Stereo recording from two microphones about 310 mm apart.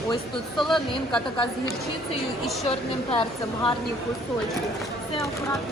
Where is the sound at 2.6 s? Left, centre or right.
Centre.